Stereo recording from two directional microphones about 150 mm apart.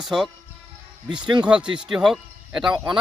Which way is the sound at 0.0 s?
Centre (ahead or behind).